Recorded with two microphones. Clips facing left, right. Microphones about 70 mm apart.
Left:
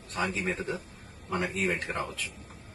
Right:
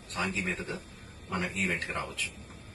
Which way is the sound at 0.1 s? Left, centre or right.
Centre.